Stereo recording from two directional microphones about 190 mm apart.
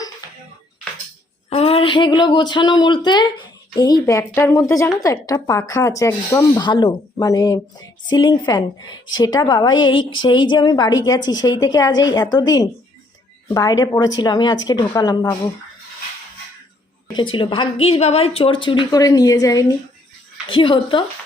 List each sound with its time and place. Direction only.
1.5 s a woman's voice: 30° left (ahead or behind)
17.3 s a woman's voice: 25° left (ahead or behind)